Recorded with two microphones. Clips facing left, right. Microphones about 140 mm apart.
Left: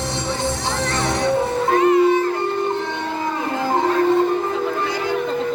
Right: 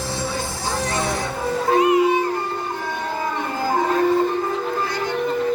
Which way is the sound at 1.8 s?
15° right (ahead or behind).